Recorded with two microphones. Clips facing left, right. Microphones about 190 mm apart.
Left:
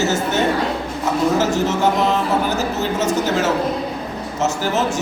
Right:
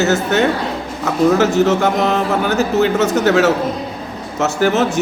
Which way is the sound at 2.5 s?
65° right (ahead or behind).